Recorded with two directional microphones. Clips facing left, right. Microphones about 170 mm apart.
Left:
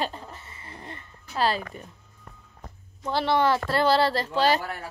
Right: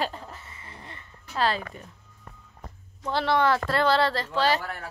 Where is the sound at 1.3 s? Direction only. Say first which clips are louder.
Left 1 dB; 5° left (ahead or behind).